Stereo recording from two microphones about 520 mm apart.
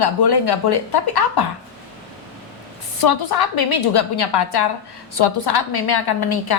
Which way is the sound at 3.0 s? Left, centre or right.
Left.